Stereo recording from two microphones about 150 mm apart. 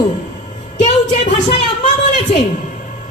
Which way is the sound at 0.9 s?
50° left (ahead or behind).